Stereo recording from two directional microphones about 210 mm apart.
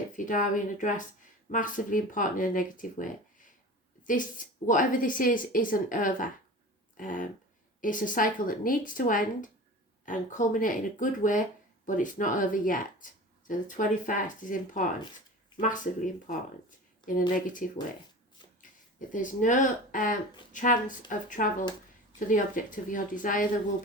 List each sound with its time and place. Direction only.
0.3 s a woman's voice: 40° left (ahead or behind)
18.9 s a woman's voice: 40° left (ahead or behind)